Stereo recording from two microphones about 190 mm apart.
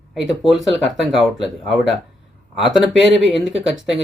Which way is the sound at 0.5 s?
Centre (ahead or behind).